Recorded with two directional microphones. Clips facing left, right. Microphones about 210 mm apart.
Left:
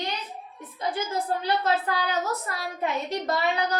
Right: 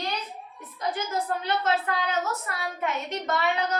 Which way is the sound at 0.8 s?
30° left (ahead or behind).